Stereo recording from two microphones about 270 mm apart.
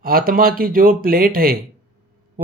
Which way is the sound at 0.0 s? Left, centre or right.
Right.